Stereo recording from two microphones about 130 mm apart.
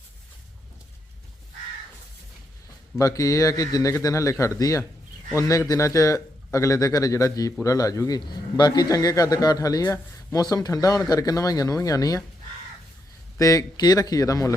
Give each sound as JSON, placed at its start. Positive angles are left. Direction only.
{"t": 3.0, "sound": "a man's voice", "side_deg": 25}
{"t": 13.4, "sound": "a man's voice", "side_deg": 25}